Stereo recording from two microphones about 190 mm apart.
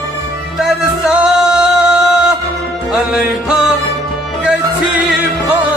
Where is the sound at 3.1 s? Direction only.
5° right (ahead or behind).